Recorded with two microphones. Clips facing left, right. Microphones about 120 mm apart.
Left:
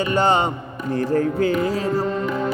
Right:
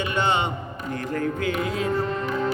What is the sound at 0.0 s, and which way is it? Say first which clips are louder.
Music: left 5 dB; 40° left (ahead or behind).